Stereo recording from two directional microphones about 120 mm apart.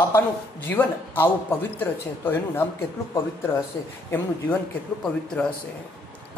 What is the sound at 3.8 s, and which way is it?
Speech, 30° left (ahead or behind).